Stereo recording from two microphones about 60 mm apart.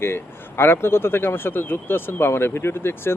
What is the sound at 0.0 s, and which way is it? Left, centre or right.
Speech, left.